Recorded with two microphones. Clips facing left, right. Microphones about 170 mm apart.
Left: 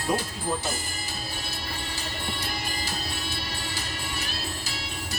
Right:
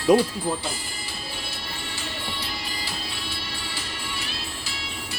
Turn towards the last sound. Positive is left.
turn(degrees=40)  # may be behind; listen again after turning